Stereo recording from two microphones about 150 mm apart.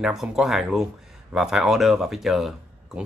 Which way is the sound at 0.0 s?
5° right (ahead or behind).